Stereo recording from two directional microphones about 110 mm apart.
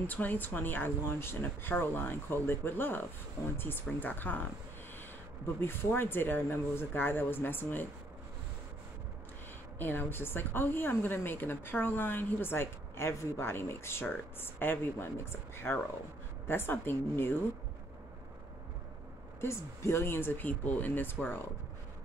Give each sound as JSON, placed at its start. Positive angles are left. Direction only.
{"t": 0.0, "sound": "a woman's voice", "side_deg": 15}
{"t": 5.6, "sound": "a woman's voice", "side_deg": 20}
{"t": 9.8, "sound": "a woman's voice", "side_deg": 20}
{"t": 19.4, "sound": "a woman's voice", "side_deg": 25}